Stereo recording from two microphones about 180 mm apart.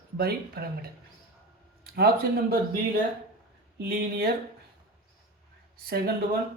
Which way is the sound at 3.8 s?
60° right (ahead or behind).